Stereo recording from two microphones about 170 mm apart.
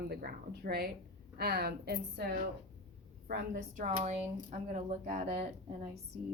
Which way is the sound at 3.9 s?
40° right (ahead or behind).